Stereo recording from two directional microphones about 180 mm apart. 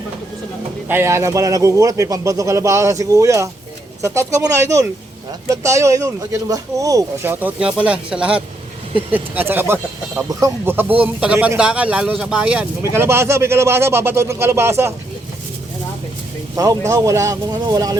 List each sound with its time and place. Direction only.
0.9 s speech: 15° right (ahead or behind)
16.9 s speech: 20° right (ahead or behind)